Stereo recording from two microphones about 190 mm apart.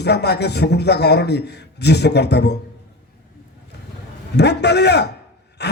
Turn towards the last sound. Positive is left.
turn(degrees=60)  # may be behind; listen again after turning